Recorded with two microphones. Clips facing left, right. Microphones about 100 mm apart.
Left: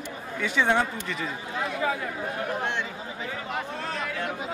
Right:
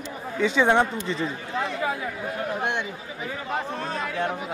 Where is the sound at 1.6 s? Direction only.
Centre (ahead or behind).